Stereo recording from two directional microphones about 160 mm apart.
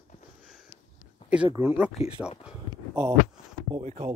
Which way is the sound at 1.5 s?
15° right (ahead or behind).